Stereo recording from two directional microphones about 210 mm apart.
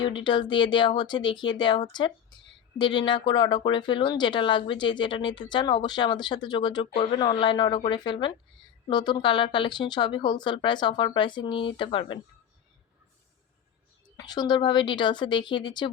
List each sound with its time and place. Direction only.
0.3 s speech: 20° left (ahead or behind)
14.2 s speech: 20° left (ahead or behind)